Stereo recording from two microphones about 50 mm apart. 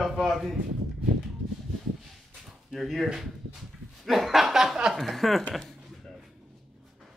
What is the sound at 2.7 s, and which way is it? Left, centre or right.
A man's voice, centre.